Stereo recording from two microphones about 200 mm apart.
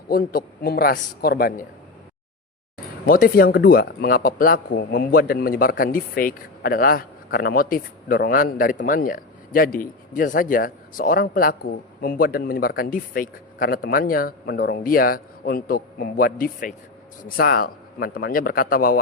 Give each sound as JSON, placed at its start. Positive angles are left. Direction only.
{"t": 0.1, "sound": "speech", "side_deg": 50}
{"t": 3.1, "sound": "speech", "side_deg": 45}